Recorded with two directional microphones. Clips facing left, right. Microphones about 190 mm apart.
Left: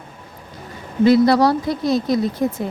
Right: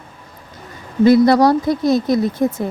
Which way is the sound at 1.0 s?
45° right (ahead or behind).